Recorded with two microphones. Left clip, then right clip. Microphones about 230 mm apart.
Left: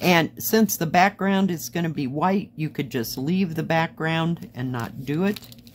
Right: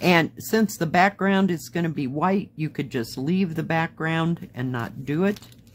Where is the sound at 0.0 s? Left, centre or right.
Centre.